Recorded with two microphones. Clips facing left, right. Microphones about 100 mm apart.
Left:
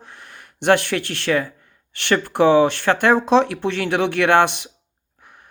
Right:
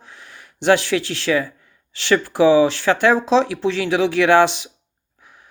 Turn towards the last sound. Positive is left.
turn(degrees=60)  # may be behind; listen again after turning